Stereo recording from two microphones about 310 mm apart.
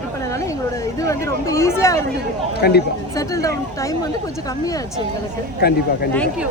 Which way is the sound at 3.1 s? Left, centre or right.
Centre.